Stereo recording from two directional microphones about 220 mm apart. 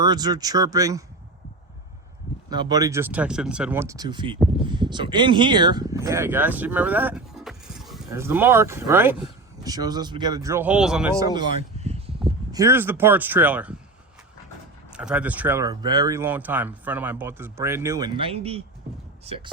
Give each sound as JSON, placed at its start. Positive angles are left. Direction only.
{"t": 0.0, "sound": "speech", "side_deg": -20}
{"t": 2.5, "sound": "speech", "side_deg": -20}
{"t": 11.2, "sound": "speech", "side_deg": -20}
{"t": 11.8, "sound": "a sound", "side_deg": -30}
{"t": 12.5, "sound": "speech", "side_deg": -15}
{"t": 14.9, "sound": "speech", "side_deg": -5}